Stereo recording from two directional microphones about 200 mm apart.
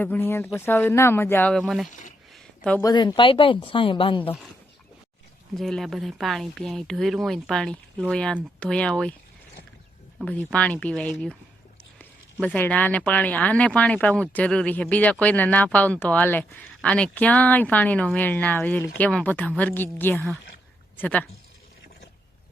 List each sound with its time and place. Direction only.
0.0 s speech: 10° left (ahead or behind)
1.9 s speech: 40° left (ahead or behind)
2.3 s a sound: 5° left (ahead or behind)
2.8 s a woman's voice: 20° left (ahead or behind)
5.5 s speech: centre (ahead or behind)
10.2 s speech: 5° left (ahead or behind)
11.9 s a sound: 5° left (ahead or behind)
13.1 s a woman's voice: 5° left (ahead or behind)